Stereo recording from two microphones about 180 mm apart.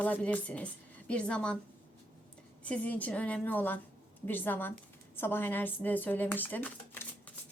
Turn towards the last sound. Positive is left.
turn(degrees=10)  # may be behind; listen again after turning